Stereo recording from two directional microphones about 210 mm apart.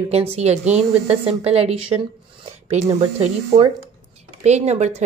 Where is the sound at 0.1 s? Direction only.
30° right (ahead or behind).